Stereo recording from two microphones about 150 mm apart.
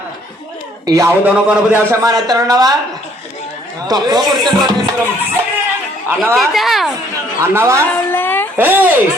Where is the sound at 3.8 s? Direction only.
25° right (ahead or behind).